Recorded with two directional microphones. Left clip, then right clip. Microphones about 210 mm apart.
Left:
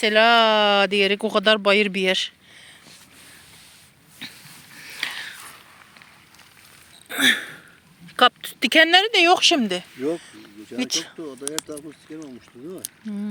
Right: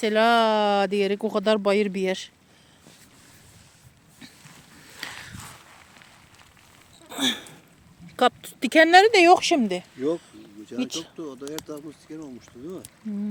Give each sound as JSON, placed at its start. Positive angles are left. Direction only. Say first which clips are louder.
{"t": 0.0, "sound": "speech", "louder": "left 4 dB", "side_deg": -15}
{"t": 4.2, "sound": "a sound", "louder": "left 10 dB", "side_deg": 10}
{"t": 4.8, "sound": "a sound", "louder": "left 8 dB", "side_deg": -15}
{"t": 7.1, "sound": "hiccup", "louder": "left 8 dB", "side_deg": 0}
{"t": 8.0, "sound": "speech", "louder": "left 4 dB", "side_deg": -5}
{"t": 11.2, "sound": "speech", "louder": "left 1 dB", "side_deg": 10}
{"t": 13.0, "sound": "speech", "louder": "even", "side_deg": -10}